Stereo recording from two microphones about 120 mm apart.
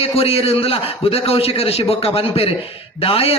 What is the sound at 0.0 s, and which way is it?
A man's voice, 55° left (ahead or behind).